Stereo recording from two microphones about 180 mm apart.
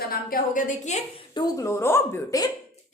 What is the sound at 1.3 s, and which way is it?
A woman's voice, 20° left (ahead or behind).